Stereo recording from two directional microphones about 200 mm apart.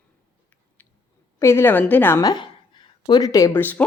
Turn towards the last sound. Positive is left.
turn(degrees=10)  # may be behind; listen again after turning